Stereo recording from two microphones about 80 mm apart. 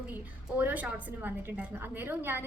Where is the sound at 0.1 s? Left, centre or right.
Right.